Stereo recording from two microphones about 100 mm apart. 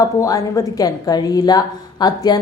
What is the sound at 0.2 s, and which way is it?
A woman's voice, 35° left (ahead or behind).